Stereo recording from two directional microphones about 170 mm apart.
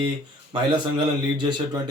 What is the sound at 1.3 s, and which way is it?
Speech, 25° right (ahead or behind).